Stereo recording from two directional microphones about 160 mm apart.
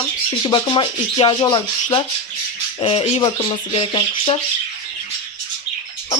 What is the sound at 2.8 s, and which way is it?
Speech, 40° left (ahead or behind).